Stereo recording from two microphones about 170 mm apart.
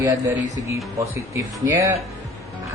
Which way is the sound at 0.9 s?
15° right (ahead or behind).